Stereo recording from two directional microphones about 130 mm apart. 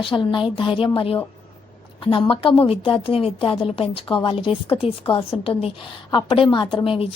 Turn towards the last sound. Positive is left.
turn(degrees=40)  # may be behind; listen again after turning